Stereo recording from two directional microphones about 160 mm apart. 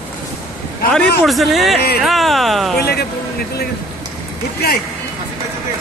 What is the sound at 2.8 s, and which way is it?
Speech, 80° left.